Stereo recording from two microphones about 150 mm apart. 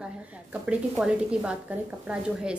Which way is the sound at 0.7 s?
5° right (ahead or behind).